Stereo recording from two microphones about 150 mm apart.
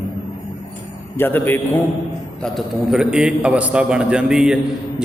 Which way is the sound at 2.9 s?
5° right (ahead or behind).